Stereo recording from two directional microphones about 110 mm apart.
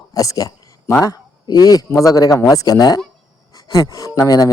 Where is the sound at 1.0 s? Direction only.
35° left (ahead or behind).